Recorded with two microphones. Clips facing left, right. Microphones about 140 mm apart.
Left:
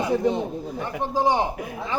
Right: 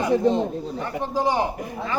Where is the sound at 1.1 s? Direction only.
20° left (ahead or behind).